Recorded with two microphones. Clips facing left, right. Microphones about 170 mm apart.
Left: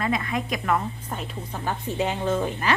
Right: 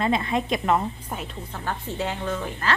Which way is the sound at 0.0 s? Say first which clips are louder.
Right 3 dB; 25° right (ahead or behind).